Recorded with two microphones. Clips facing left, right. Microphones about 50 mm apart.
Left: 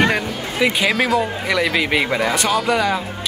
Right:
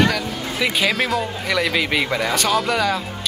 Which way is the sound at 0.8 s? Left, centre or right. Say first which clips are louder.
Left 1 dB; centre.